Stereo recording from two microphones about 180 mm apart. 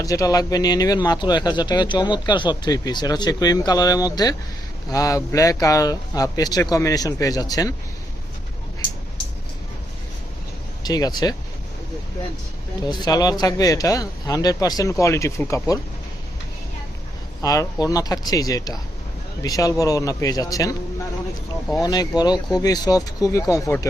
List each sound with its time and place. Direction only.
0.0 s speech: 20° left (ahead or behind)
10.8 s speech: 20° left (ahead or behind)
12.8 s speech: 20° left (ahead or behind)
17.4 s speech: 20° left (ahead or behind)
21.8 s speech: 25° left (ahead or behind)